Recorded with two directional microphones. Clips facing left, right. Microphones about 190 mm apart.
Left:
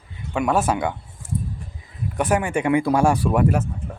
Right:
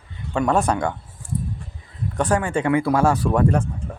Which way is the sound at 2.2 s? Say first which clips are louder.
Even; 10° left (ahead or behind).